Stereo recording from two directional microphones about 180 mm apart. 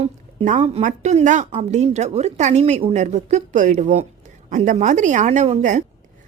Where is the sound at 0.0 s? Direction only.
40° right (ahead or behind).